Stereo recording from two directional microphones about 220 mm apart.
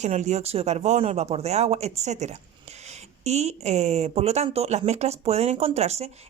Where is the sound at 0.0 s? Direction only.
30° right (ahead or behind).